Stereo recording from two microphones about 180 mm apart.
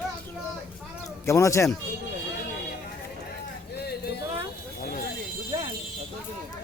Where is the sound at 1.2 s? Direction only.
15° left (ahead or behind).